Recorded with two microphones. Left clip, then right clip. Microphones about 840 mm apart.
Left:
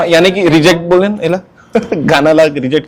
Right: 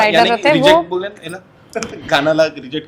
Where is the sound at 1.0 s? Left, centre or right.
Left.